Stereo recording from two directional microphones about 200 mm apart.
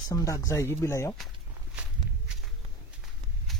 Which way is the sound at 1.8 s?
5° right (ahead or behind).